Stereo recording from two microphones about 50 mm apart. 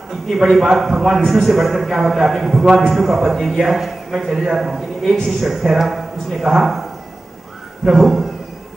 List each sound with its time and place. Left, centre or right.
0.1 s a man's voice: centre
7.8 s a man's voice: centre